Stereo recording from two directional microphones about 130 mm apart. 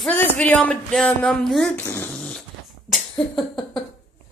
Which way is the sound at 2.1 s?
5° left (ahead or behind).